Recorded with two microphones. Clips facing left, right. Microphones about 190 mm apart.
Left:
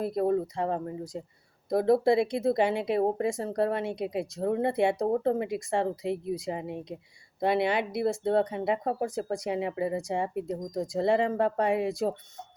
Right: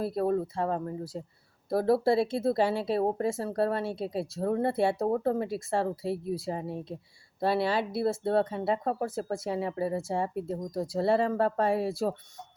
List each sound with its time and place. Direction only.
0.0 s speech: 20° left (ahead or behind)